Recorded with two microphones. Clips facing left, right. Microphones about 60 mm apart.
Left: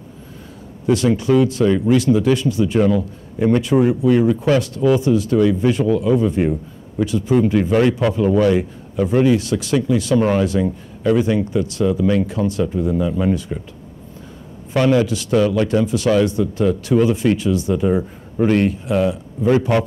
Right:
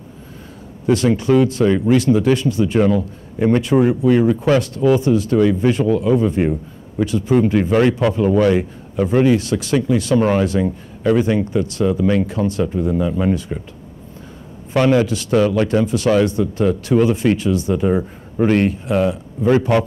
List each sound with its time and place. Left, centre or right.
0.8 s speech: right
14.7 s speech: right